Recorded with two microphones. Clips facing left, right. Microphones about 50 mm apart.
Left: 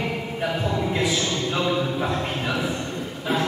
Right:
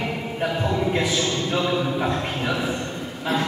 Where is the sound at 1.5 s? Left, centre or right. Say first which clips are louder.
Right 1 dB; centre.